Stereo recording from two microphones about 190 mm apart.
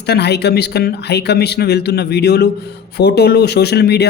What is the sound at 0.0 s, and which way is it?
Speech, 60° left (ahead or behind).